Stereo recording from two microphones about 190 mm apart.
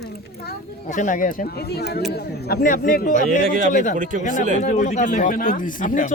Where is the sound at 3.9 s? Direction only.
45° right (ahead or behind).